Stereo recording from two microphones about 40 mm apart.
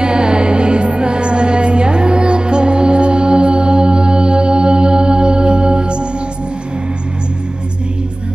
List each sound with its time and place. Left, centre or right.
0.0 s music: right